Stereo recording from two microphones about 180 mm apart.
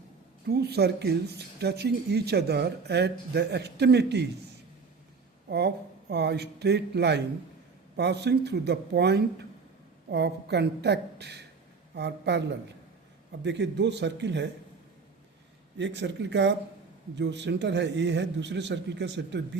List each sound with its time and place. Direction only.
0.4 s speech: 65° right (ahead or behind)
5.5 s speech: 65° right (ahead or behind)
15.8 s speech: 80° right